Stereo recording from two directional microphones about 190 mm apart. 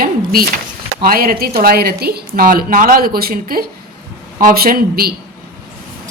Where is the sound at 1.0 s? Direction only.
50° right (ahead or behind).